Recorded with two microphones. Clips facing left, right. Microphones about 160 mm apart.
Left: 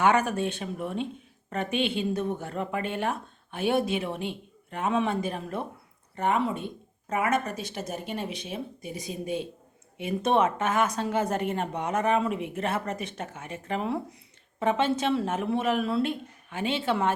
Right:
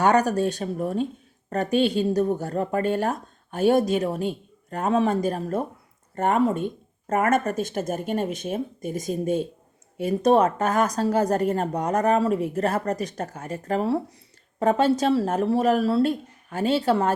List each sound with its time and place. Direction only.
0.0 s a woman's voice: 40° right (ahead or behind)